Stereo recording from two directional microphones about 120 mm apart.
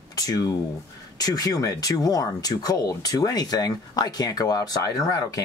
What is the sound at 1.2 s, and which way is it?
Speech, 35° left (ahead or behind).